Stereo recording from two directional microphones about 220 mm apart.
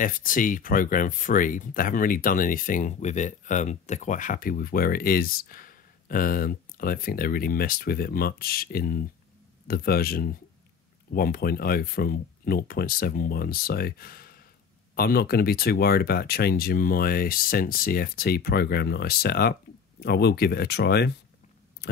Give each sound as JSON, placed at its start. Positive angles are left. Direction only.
{"t": 0.0, "sound": "speech", "side_deg": 40}